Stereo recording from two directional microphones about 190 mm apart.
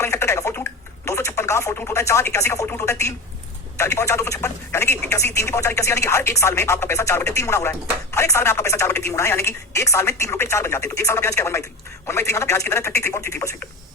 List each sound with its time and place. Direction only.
0.0 s telephone: 15° left (ahead or behind)
3.8 s speech: 15° left (ahead or behind)